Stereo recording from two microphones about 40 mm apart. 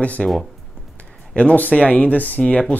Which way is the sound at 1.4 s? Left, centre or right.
Left.